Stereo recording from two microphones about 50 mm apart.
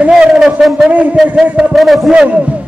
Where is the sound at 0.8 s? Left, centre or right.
Right.